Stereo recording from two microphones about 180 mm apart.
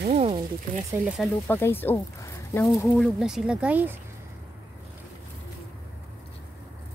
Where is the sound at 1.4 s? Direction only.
10° left (ahead or behind).